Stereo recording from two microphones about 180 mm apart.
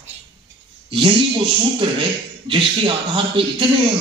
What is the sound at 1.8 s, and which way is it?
A man's voice, 30° right (ahead or behind).